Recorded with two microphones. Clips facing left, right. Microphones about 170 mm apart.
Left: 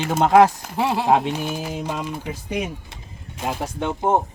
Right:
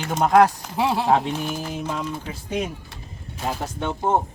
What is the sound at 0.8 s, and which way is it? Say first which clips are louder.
Speech: left 1 dB; 10° left (ahead or behind).